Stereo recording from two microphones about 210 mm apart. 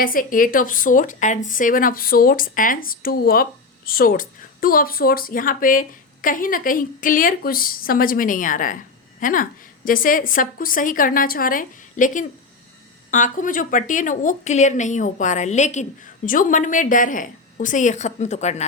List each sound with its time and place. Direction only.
0.0 s a woman's voice: 40° left (ahead or behind)